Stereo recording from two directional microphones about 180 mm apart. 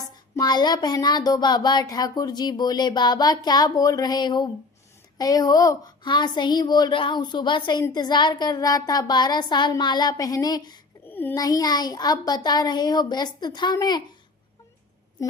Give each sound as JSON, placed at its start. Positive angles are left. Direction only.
{"t": 0.3, "sound": "a woman's voice", "side_deg": 25}